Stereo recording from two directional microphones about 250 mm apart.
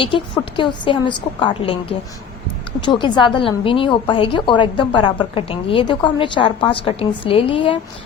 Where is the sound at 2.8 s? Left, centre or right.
Centre.